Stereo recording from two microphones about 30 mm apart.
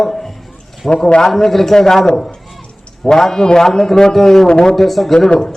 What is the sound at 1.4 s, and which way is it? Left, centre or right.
Speech, centre.